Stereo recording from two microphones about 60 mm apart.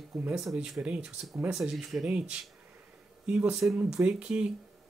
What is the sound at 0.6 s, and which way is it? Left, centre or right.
Speech, centre.